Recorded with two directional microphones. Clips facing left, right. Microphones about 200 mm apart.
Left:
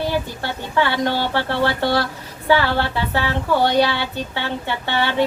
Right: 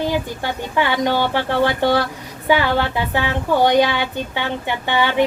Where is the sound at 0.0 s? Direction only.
15° right (ahead or behind).